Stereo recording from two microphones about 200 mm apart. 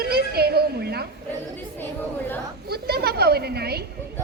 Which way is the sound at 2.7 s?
55° right (ahead or behind).